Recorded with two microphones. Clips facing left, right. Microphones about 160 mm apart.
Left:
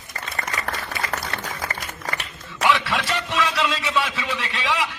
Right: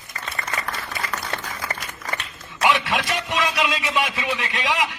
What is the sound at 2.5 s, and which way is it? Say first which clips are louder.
A man's voice: even; 15° right (ahead or behind).